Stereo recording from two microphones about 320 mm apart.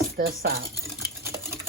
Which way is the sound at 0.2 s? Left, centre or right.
Right.